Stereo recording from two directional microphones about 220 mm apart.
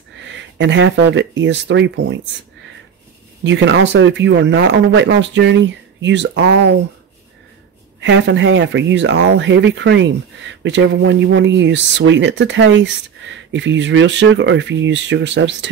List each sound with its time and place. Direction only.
0.6 s speech: 55° right (ahead or behind)
3.4 s speech: 55° right (ahead or behind)
8.0 s speech: 55° right (ahead or behind)